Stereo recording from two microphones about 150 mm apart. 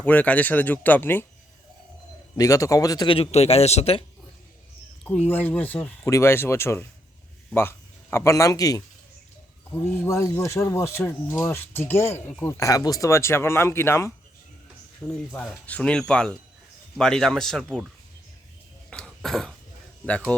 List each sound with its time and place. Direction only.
0.0 s speech: 10° left (ahead or behind)
2.3 s a man's voice: 20° left (ahead or behind); by 4.0 s 45° left (ahead or behind)
5.0 s speech: 10° left (ahead or behind)
15.0 s speech: centre (ahead or behind)
18.9 s cough: 5° left (ahead or behind)
20.1 s speech: 10° left (ahead or behind)